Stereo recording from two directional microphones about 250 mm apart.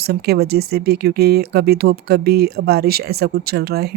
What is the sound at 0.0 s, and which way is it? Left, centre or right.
Speech, right.